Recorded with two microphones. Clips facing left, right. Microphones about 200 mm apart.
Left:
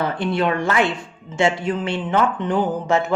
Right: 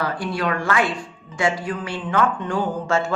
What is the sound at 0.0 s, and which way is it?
Speech, 25° left (ahead or behind).